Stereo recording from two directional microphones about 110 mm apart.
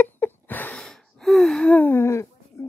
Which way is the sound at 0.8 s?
5° left (ahead or behind).